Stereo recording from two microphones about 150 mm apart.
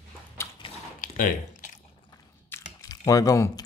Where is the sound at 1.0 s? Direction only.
65° left (ahead or behind).